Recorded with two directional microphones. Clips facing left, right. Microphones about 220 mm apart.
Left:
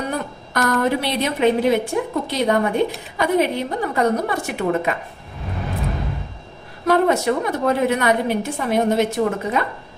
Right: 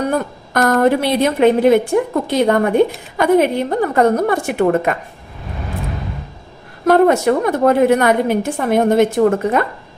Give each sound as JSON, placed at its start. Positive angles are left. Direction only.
{"t": 0.1, "sound": "a woman's voice", "side_deg": -50}
{"t": 6.8, "sound": "a woman's voice", "side_deg": -50}